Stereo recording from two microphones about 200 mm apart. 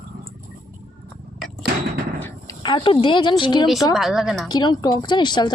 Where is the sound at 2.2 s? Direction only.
20° left (ahead or behind).